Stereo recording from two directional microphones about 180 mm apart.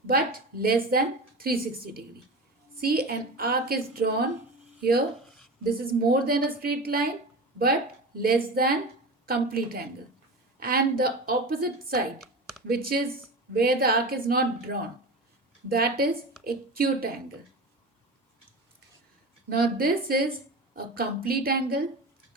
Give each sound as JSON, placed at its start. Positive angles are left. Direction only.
{"t": 0.1, "sound": "a woman's voice", "side_deg": -55}
{"t": 12.2, "sound": "computer keyboard", "side_deg": 0}
{"t": 12.6, "sound": "a woman's voice", "side_deg": -55}
{"t": 19.5, "sound": "a woman's voice", "side_deg": -55}